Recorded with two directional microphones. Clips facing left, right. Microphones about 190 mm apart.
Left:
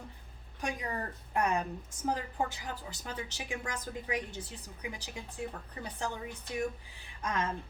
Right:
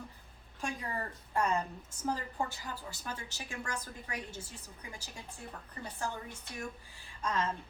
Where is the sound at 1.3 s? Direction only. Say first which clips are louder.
Left 1 dB; 15° left (ahead or behind).